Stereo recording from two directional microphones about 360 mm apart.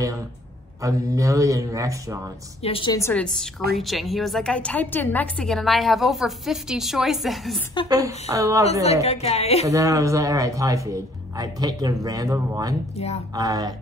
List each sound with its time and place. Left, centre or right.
0.8 s speech: centre
2.6 s a woman's voice: centre
9.0 s a woman's voice: centre
9.7 s speech: centre
12.9 s a woman's voice: centre
13.3 s speech: centre